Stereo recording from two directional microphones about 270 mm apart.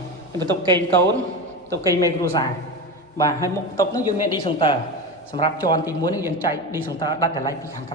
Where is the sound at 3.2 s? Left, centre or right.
Centre.